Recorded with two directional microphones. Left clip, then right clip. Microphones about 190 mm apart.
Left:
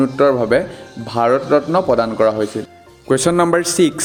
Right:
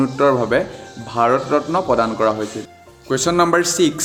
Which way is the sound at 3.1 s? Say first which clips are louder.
Left 2 dB; 40° left (ahead or behind).